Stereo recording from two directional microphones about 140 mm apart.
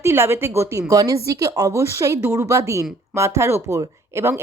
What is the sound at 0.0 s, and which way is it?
Speech, 15° right (ahead or behind).